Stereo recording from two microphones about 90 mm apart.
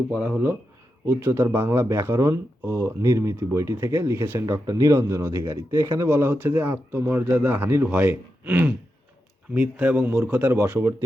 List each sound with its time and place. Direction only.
1.0 s speech: 25° right (ahead or behind)